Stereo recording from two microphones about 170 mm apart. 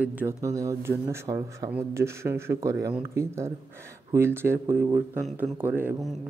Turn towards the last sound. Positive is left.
turn(degrees=-10)  # may be behind; listen again after turning